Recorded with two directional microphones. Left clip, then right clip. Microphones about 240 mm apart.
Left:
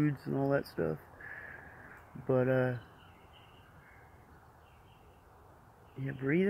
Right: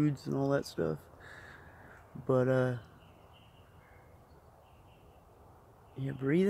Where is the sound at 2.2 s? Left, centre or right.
Centre.